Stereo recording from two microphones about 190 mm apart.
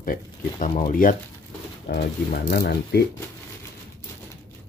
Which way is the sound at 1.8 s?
55° left (ahead or behind).